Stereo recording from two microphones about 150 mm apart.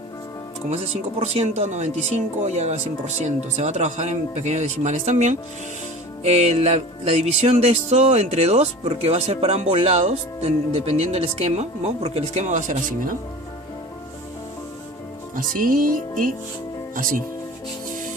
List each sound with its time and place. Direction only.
1.2 s music: 45° right (ahead or behind)
15.4 s music: 70° right (ahead or behind)
16.9 s speech: 65° right (ahead or behind)